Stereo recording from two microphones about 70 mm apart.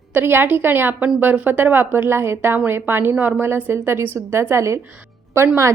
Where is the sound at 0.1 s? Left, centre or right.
Right.